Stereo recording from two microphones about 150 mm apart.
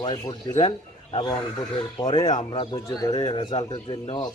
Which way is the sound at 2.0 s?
25° left (ahead or behind).